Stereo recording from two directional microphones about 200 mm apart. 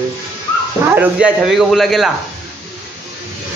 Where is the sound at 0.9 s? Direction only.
5° right (ahead or behind).